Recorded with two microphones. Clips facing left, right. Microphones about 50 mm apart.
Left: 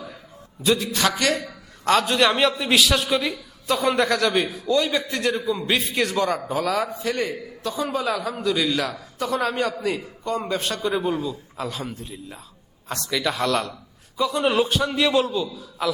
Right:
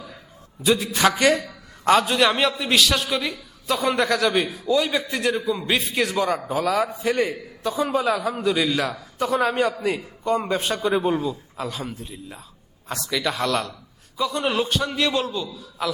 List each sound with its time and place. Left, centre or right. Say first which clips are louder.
0.6 s a man's voice: right 2 dB; centre
11.0 s a man's voice: right 2 dB; centre
11.5 s a man's voice: even; centre